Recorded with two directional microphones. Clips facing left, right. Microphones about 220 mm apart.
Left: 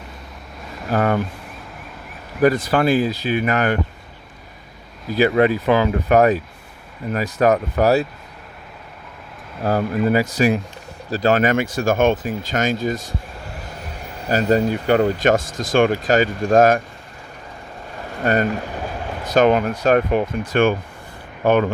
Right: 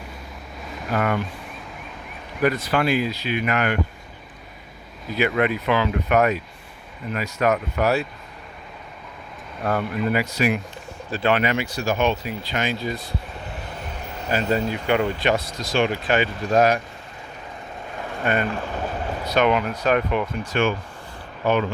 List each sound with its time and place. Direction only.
0.9 s speech: 35° left (ahead or behind)
2.7 s speech: 35° left (ahead or behind)
5.1 s speech: 35° left (ahead or behind)
9.6 s speech: 40° left (ahead or behind)
14.3 s speech: 40° left (ahead or behind)
18.2 s speech: 40° left (ahead or behind)
18.7 s boat: 10° left (ahead or behind)
19.3 s speech: 45° left (ahead or behind)